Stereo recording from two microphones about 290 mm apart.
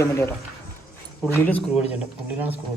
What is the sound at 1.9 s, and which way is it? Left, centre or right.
Speech, centre.